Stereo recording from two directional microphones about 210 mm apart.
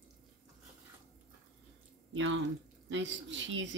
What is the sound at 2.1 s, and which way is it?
Speech, 65° right (ahead or behind).